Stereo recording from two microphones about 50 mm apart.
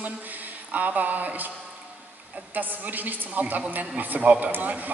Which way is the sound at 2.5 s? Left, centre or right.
Right.